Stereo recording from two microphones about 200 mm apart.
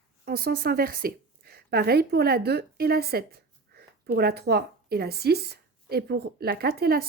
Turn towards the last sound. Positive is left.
turn(degrees=-50)  # may be behind; listen again after turning